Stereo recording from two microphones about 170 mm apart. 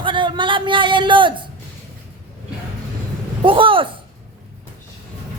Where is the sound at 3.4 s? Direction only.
30° right (ahead or behind).